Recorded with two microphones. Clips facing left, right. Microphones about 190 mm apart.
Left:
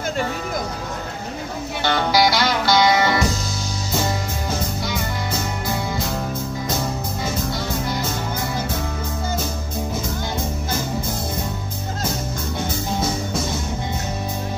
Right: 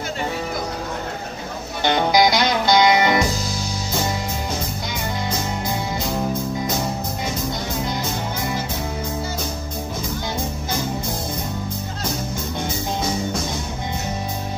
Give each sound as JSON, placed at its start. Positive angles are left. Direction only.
{"t": 1.9, "sound": "music", "side_deg": -20}